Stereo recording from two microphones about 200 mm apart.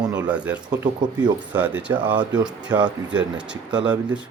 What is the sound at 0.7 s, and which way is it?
Speech, 20° right (ahead or behind).